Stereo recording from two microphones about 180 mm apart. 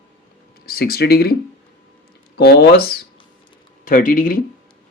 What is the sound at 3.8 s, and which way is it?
Speech, 50° left (ahead or behind).